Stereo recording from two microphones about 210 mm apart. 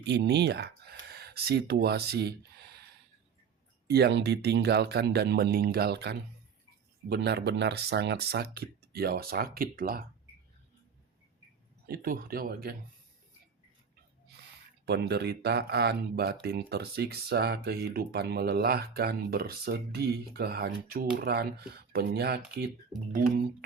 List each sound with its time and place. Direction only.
0.0 s speech: 55° right (ahead or behind)
3.8 s speech: 50° right (ahead or behind)
11.9 s speech: 45° right (ahead or behind)
14.8 s speech: 50° right (ahead or behind)